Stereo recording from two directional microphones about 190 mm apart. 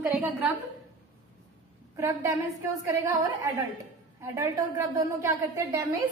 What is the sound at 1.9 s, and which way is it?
A woman's voice, 15° right (ahead or behind).